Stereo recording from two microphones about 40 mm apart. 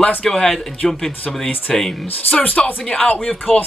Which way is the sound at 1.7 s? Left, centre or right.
Centre.